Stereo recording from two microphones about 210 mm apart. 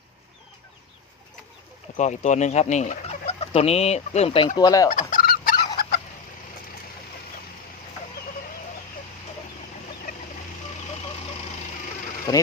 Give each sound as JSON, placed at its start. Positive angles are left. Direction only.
{"t": 2.0, "sound": "speech", "side_deg": 35}
{"t": 4.9, "sound": "fowl", "side_deg": 40}
{"t": 10.1, "sound": "fowl", "side_deg": 40}
{"t": 12.3, "sound": "speech", "side_deg": 15}